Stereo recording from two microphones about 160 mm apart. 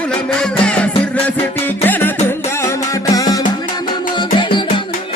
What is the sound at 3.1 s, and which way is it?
Music, 20° left (ahead or behind).